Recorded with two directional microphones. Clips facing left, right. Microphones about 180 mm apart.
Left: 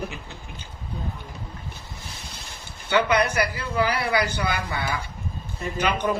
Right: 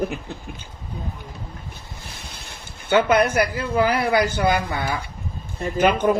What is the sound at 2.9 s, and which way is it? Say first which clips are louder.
Speech: right 4 dB; 50° right (ahead or behind).